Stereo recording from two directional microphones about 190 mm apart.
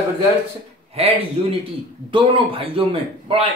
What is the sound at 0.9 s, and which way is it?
A man's voice, 30° right (ahead or behind).